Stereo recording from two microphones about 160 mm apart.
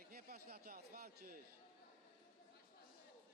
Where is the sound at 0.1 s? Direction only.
70° right (ahead or behind).